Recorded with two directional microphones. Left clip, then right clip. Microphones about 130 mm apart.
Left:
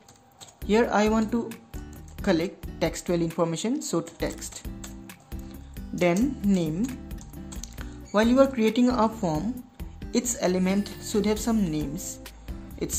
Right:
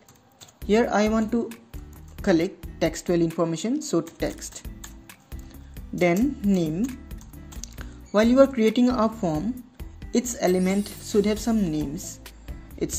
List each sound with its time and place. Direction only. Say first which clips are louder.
0.7 s speech: right 1 dB; 10° right (ahead or behind)